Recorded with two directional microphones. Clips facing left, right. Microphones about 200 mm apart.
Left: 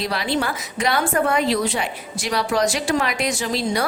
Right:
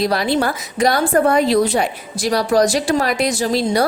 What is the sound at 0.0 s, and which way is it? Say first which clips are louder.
A woman's voice: right 6 dB; 40° right (ahead or behind).